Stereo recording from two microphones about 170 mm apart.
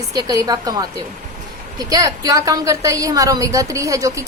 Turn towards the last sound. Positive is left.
turn(degrees=-20)  # may be behind; listen again after turning